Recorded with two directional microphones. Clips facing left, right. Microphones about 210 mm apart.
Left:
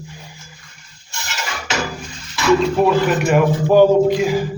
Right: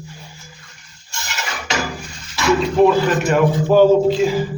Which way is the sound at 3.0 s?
10° left (ahead or behind).